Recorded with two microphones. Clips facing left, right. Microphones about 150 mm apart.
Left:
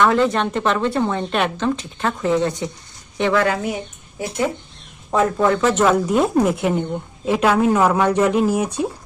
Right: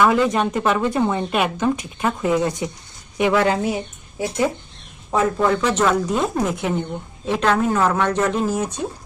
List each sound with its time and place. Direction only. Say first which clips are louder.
0.0 s a woman's voice: even; 5° right (ahead or behind)
3.4 s speech: right 1 dB; 25° right (ahead or behind)
5.1 s speech: left 1 dB; centre (ahead or behind)